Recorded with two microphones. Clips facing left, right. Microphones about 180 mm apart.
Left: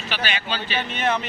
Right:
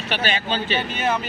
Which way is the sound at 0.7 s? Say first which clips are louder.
Right 3 dB; 35° right (ahead or behind).